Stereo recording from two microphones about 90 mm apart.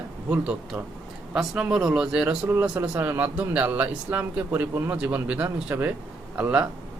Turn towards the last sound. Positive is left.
turn(degrees=-20)  # may be behind; listen again after turning